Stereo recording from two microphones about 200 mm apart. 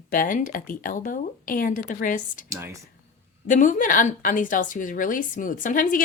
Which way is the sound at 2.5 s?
15° right (ahead or behind).